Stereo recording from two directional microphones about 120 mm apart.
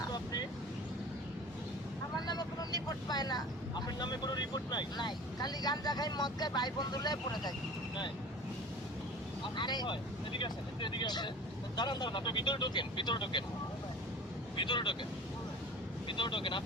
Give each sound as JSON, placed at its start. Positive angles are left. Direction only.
{"t": 2.2, "sound": "speech", "side_deg": 35}
{"t": 9.4, "sound": "speech", "side_deg": 40}
{"t": 14.5, "sound": "speech", "side_deg": 40}
{"t": 16.0, "sound": "speech", "side_deg": 45}